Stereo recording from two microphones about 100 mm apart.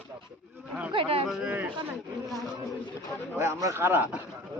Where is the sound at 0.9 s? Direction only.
70° right (ahead or behind).